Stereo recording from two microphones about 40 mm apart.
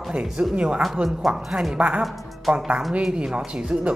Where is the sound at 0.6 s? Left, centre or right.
Right.